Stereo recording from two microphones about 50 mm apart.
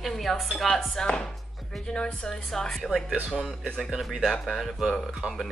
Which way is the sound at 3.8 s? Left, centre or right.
Centre.